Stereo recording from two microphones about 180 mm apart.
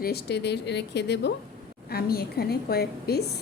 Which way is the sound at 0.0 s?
65° left (ahead or behind).